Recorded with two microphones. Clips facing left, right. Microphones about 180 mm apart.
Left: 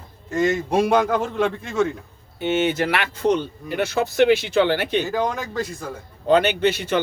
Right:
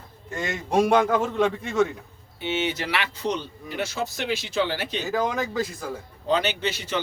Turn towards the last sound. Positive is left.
turn(degrees=55)  # may be behind; listen again after turning